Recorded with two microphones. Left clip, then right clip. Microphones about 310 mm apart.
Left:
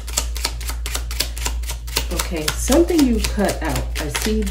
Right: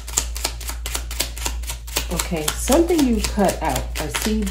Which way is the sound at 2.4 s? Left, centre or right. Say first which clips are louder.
Left 1 dB; centre.